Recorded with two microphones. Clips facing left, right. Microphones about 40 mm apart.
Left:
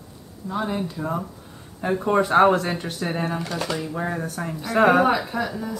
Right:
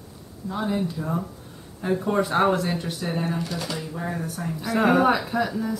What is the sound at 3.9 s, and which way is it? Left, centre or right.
Speech, left.